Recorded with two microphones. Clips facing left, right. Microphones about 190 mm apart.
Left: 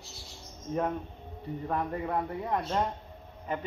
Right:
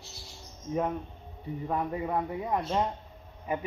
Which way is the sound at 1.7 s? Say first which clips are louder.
Right 1 dB; 10° right (ahead or behind).